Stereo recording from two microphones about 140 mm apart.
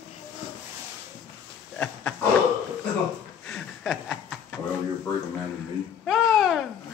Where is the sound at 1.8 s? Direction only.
10° left (ahead or behind).